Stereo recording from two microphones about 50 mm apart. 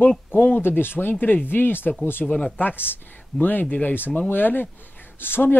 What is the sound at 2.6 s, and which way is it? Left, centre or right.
Speech, left.